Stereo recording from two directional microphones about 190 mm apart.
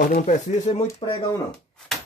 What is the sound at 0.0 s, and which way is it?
Speech, 40° left (ahead or behind).